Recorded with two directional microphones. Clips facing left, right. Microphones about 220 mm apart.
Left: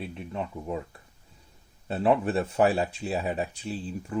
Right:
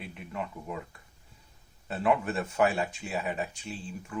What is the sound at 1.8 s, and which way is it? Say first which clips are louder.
Speech: left 4 dB; 30° left (ahead or behind).